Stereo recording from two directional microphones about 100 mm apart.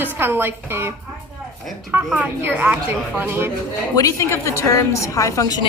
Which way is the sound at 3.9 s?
35° left (ahead or behind).